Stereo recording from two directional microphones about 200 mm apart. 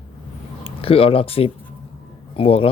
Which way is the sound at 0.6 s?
30° left (ahead or behind).